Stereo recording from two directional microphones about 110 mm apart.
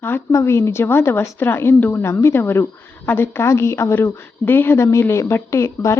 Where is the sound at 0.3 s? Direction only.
25° left (ahead or behind).